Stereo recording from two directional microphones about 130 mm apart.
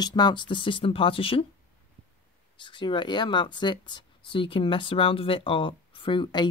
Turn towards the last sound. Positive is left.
turn(degrees=35)  # may be behind; listen again after turning